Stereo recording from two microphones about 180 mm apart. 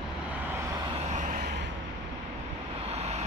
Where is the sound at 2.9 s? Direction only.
35° right (ahead or behind).